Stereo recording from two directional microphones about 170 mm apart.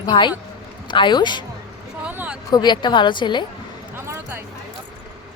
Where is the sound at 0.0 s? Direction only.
25° left (ahead or behind).